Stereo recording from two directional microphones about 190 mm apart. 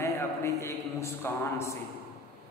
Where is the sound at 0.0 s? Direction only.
15° left (ahead or behind).